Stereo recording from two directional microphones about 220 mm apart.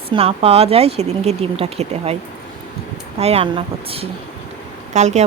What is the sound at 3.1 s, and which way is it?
Speech, 25° right (ahead or behind).